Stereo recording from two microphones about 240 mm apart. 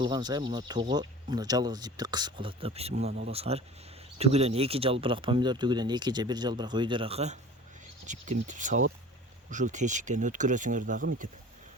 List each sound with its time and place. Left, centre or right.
0.0 s speech: centre